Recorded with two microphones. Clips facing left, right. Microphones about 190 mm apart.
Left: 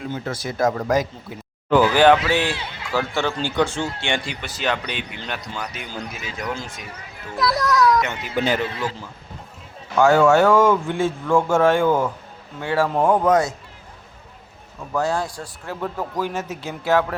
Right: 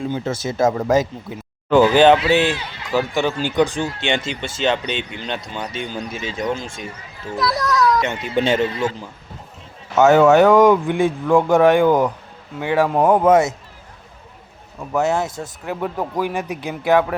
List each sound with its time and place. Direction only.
0.1 s a man's voice: 25° right (ahead or behind)
7.3 s a child's voice: centre (ahead or behind)
8.0 s a man's voice: 25° right (ahead or behind)
14.9 s a man's voice: 20° right (ahead or behind)